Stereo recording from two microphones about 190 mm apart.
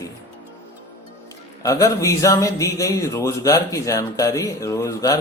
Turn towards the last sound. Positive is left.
turn(degrees=15)  # may be behind; listen again after turning